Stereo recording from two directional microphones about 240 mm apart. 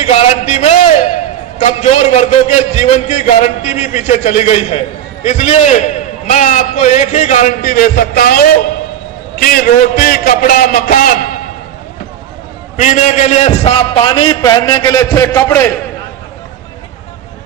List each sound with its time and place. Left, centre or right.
0.0 s a sound: left
1.5 s a man's voice: left
12.7 s a man's voice: left; by 15.7 s centre